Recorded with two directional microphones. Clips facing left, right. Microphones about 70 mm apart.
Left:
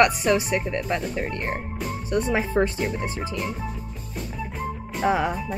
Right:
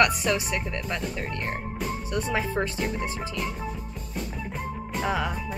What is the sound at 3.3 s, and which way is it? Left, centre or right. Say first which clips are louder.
Music: left 2 dB; centre.